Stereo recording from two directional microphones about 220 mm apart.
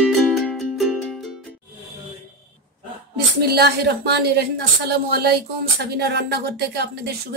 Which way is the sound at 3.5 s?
45° right (ahead or behind).